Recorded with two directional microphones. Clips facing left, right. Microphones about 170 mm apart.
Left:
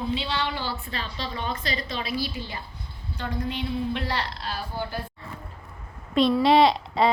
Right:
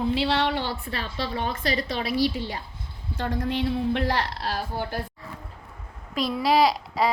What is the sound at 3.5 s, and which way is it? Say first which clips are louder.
A woman's voice: right 4 dB; 75° right (ahead or behind).